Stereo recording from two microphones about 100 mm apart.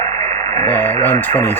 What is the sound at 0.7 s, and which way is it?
Radio, 20° left (ahead or behind).